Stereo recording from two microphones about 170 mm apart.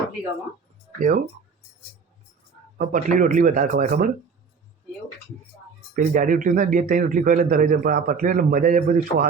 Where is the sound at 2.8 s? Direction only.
50° right (ahead or behind).